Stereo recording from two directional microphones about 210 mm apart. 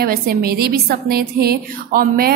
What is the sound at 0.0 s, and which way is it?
A woman's voice, 45° right (ahead or behind).